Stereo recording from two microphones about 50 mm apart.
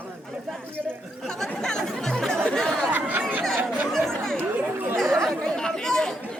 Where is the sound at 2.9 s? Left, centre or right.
Right.